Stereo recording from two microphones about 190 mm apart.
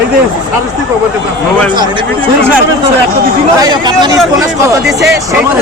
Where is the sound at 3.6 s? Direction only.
20° right (ahead or behind).